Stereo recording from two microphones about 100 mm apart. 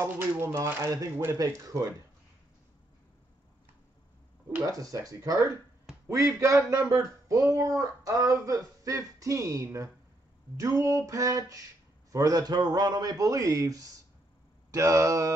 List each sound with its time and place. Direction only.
0.0 s speech: 20° right (ahead or behind)
4.7 s speech: 35° right (ahead or behind)